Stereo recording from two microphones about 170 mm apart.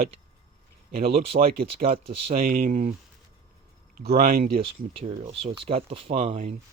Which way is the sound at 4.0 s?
65° right (ahead or behind).